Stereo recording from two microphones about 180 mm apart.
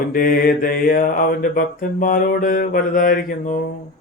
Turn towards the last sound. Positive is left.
turn(degrees=50)  # may be behind; listen again after turning